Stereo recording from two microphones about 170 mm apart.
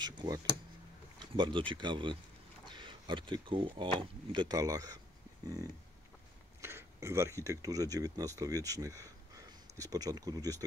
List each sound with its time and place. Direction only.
0.0 s speech: 25° right (ahead or behind)
6.6 s speech: 15° right (ahead or behind)